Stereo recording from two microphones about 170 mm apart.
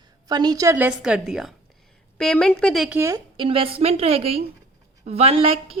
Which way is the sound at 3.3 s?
30° right (ahead or behind).